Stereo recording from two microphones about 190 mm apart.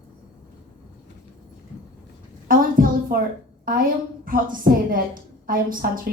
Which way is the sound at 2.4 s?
45° right (ahead or behind).